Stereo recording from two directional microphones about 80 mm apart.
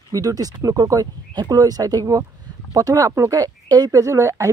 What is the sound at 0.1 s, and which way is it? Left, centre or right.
Speech, right.